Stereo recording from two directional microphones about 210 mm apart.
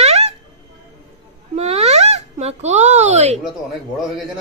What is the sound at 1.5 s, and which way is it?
Speech, 30° right (ahead or behind).